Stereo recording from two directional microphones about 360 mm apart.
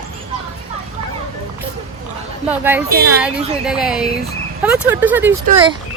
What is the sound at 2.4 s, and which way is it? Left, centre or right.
A woman's voice, centre.